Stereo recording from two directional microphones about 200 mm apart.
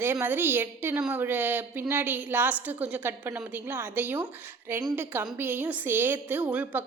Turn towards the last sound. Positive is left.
turn(degrees=-5)  # may be behind; listen again after turning